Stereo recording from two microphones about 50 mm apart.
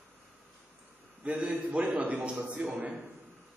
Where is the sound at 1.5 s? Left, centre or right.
Right.